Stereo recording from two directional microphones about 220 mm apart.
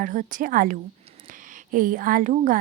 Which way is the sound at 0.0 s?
35° right (ahead or behind).